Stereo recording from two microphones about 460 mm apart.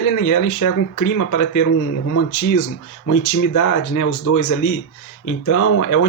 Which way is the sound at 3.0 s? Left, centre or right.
Left.